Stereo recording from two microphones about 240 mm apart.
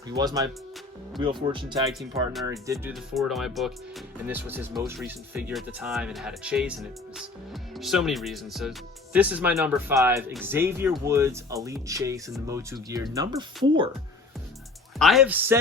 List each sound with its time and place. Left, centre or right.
0.2 s speech: centre
1.9 s speech: centre
7.8 s speech: centre
14.9 s speech: centre